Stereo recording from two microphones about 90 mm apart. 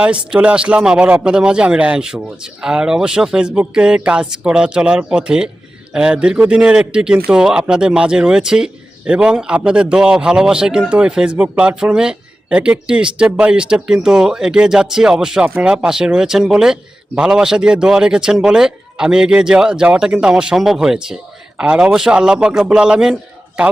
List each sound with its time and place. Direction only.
0.0 s a man's voice: 15° right (ahead or behind)